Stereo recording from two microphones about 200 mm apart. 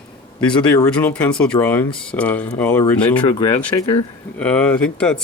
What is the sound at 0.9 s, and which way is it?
Speech, 5° left (ahead or behind).